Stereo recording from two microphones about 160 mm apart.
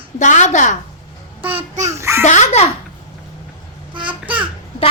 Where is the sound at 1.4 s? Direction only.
40° right (ahead or behind).